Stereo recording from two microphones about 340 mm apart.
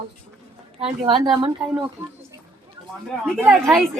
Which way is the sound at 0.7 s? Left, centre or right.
Centre.